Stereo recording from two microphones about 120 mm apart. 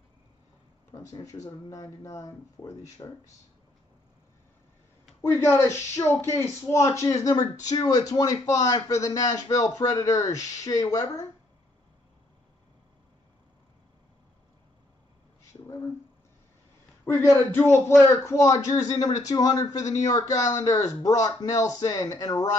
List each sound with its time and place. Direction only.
1.0 s speech: 25° left (ahead or behind)
5.2 s speech: 20° left (ahead or behind)
17.0 s speech: 20° left (ahead or behind)